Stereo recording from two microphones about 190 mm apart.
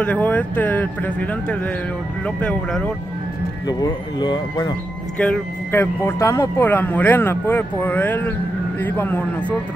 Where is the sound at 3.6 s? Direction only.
20° left (ahead or behind).